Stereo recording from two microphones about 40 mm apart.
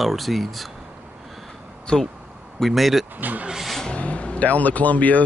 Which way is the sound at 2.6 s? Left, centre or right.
Centre.